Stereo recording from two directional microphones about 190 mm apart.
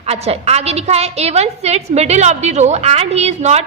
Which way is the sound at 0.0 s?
35° right (ahead or behind).